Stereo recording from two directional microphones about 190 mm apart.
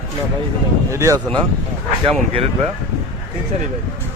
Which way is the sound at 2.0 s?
30° right (ahead or behind).